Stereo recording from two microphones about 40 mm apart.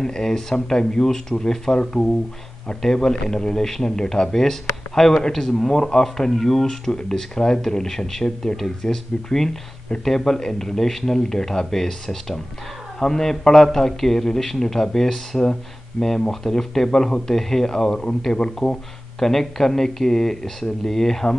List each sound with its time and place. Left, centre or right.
0.0 s speech: centre
2.8 s speech: centre
18.3 s speech: centre